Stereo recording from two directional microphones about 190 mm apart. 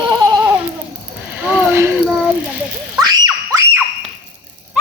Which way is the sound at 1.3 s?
10° right (ahead or behind).